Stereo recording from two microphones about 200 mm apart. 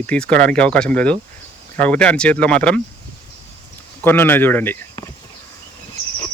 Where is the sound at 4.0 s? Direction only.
10° left (ahead or behind).